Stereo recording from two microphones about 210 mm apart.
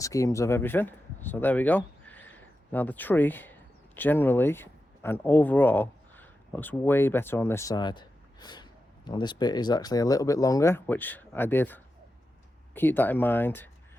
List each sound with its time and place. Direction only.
0.0 s speech: 15° left (ahead or behind)